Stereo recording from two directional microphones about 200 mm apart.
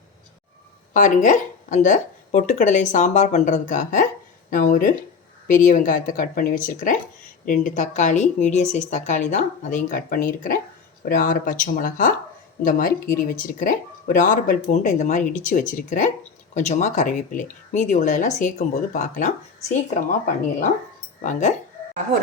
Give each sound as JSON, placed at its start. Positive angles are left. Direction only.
{"t": 0.9, "sound": "speech", "side_deg": 40}